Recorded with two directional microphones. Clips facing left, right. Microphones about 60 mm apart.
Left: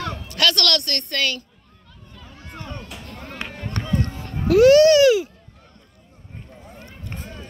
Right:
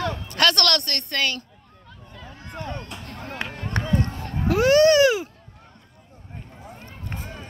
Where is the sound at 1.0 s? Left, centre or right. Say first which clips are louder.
Left 1 dB; centre.